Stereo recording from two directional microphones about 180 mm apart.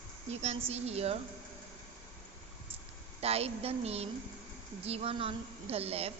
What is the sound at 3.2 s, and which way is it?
A woman's voice, 35° right (ahead or behind).